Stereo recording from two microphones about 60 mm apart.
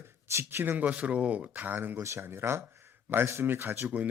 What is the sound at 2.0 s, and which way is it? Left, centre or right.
Speech, right.